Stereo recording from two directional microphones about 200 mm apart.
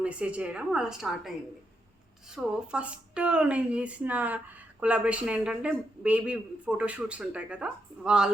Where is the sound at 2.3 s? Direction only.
5° right (ahead or behind).